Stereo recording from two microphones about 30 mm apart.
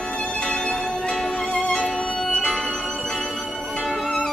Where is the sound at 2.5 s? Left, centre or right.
Centre.